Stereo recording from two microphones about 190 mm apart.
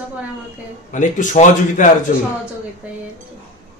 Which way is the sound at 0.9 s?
40° left (ahead or behind).